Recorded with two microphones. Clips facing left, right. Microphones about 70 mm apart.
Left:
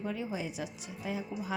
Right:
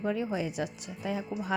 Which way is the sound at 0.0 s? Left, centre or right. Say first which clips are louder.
Right 5 dB; right.